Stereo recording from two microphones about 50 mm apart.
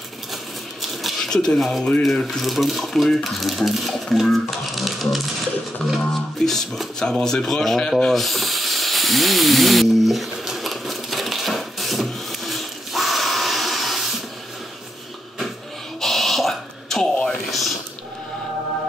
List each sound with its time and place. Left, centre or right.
1.0 s speech: centre
6.4 s music: centre
8.1 s hiss: centre
16.0 s a sound: centre